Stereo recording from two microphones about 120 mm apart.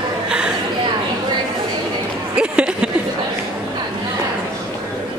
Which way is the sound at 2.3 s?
10° right (ahead or behind).